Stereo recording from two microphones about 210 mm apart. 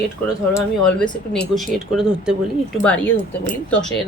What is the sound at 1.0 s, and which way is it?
Speech, centre (ahead or behind).